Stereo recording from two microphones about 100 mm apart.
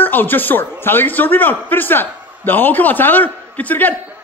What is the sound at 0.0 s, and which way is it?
A man's voice, 20° left (ahead or behind).